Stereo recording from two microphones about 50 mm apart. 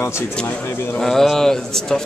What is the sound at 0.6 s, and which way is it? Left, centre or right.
Speech, left.